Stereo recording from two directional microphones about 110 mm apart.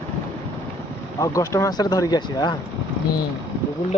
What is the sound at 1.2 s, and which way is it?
Speech, 30° left (ahead or behind).